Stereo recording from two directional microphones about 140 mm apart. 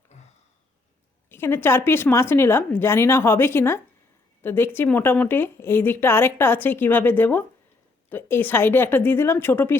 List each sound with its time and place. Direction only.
1.3 s a woman's voice: 15° left (ahead or behind)